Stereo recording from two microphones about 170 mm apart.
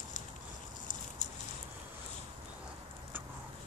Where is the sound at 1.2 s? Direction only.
45° left (ahead or behind).